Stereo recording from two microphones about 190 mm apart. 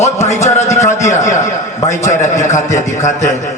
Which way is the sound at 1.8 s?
15° left (ahead or behind).